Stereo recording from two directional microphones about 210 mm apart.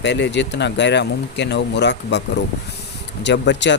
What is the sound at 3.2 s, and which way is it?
Speech, 55° left (ahead or behind).